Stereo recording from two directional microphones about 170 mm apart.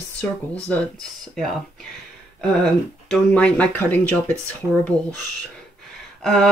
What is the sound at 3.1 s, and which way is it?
Speech, 5° left (ahead or behind).